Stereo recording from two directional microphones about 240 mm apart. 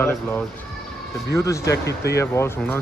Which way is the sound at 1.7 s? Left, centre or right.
Left.